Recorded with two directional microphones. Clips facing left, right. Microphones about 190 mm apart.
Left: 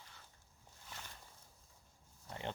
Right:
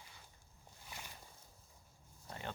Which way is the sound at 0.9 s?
10° right (ahead or behind).